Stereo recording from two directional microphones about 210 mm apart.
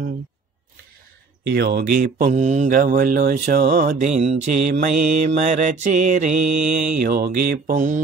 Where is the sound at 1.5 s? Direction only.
50° right (ahead or behind).